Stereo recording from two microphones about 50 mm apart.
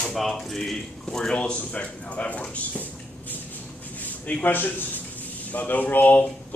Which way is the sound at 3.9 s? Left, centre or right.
Left.